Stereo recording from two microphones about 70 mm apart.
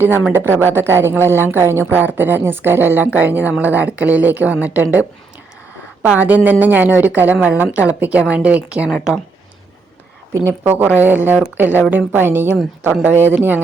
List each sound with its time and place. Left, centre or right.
0.0 s speech: right
10.4 s speech: right